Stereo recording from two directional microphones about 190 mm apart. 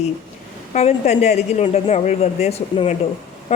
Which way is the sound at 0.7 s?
35° left (ahead or behind).